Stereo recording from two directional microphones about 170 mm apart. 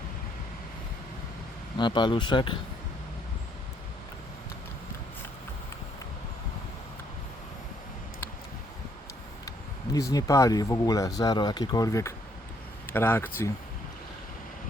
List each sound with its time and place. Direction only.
1.8 s speech: 25° left (ahead or behind)
9.9 s speech: 20° left (ahead or behind)